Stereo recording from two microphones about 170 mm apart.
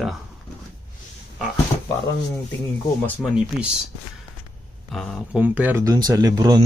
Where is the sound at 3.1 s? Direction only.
5° right (ahead or behind).